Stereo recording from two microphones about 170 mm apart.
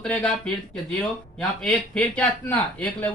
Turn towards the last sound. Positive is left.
turn(degrees=10)  # may be behind; listen again after turning